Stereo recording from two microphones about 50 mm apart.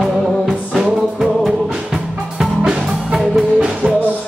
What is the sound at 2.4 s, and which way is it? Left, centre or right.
Music, centre.